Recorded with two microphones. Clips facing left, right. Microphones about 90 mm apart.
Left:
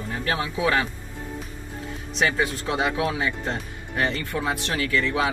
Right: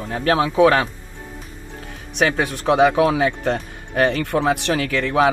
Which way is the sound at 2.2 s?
60° right (ahead or behind).